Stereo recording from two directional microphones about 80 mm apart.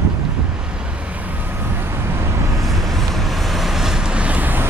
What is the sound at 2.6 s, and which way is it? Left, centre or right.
Vehicle, centre.